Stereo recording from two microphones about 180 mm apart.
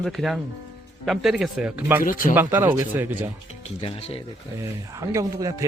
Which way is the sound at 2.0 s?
50° left (ahead or behind).